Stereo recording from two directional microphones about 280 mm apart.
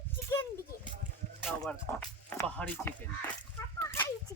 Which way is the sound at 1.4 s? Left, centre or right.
Centre.